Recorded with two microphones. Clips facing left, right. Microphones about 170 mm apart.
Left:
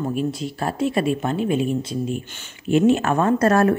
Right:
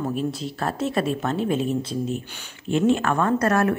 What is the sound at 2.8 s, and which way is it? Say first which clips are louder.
Speech: left 1 dB; 20° left (ahead or behind).